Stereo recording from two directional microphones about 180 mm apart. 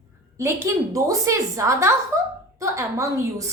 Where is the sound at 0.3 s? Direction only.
15° right (ahead or behind).